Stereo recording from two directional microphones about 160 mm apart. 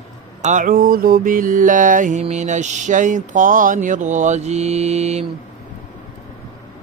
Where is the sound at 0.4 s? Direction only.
55° right (ahead or behind).